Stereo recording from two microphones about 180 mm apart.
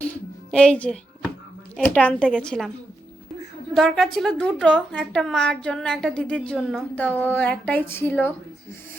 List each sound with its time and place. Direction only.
0.5 s a woman's voice: 5° left (ahead or behind)
3.8 s a woman's voice: centre (ahead or behind)